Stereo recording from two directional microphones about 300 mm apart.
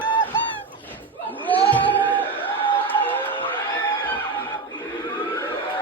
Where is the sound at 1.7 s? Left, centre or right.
Centre.